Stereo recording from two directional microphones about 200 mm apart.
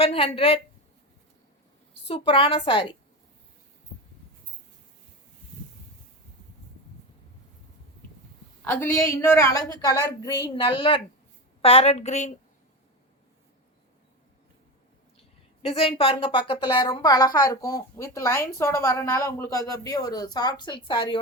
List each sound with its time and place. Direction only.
0.0 s a woman's voice: 30° left (ahead or behind)
2.0 s a woman's voice: 30° left (ahead or behind)
8.6 s a woman's voice: 10° left (ahead or behind); by 12.3 s 35° left (ahead or behind)
15.6 s a woman's voice: 30° left (ahead or behind)